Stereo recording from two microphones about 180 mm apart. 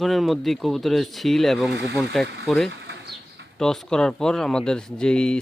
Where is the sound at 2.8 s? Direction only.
70° right (ahead or behind).